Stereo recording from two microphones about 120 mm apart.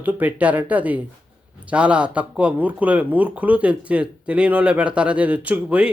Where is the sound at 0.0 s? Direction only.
15° right (ahead or behind).